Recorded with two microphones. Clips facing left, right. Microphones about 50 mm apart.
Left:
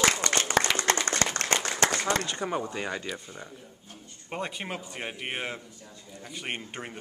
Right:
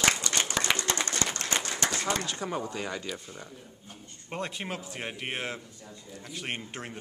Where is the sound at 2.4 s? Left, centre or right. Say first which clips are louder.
Left 2 dB; centre.